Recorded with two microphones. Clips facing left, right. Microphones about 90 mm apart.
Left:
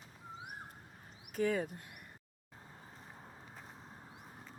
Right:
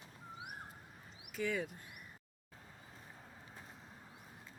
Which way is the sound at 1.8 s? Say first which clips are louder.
Left 1 dB; 55° left (ahead or behind).